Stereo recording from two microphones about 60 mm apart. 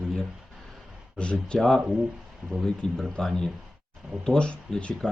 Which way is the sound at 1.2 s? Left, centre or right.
Centre.